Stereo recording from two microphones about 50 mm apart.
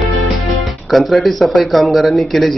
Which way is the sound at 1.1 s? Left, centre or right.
Centre.